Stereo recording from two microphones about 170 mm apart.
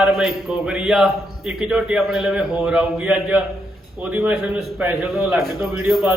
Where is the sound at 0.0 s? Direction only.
5° right (ahead or behind).